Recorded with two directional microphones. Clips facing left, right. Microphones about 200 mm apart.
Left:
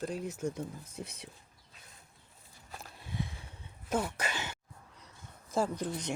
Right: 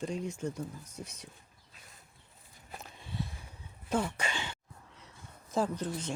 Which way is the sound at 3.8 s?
5° left (ahead or behind).